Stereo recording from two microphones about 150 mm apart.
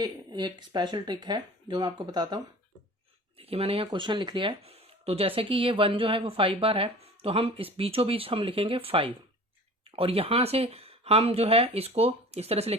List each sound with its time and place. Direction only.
0.0 s speech: 30° right (ahead or behind)
3.3 s speech: 40° right (ahead or behind)